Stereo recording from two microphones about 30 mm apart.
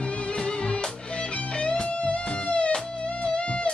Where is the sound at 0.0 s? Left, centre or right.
Left.